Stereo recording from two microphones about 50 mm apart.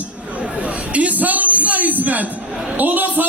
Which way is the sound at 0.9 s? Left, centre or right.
Right.